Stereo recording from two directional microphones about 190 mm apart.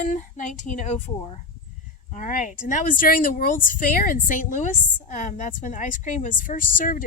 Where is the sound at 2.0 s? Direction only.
40° left (ahead or behind).